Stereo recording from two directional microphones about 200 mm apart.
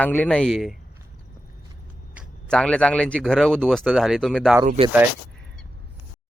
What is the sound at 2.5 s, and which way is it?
A man's voice, 5° left (ahead or behind).